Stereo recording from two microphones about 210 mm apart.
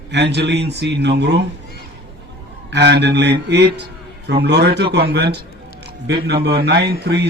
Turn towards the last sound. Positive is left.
turn(degrees=-50)  # may be behind; listen again after turning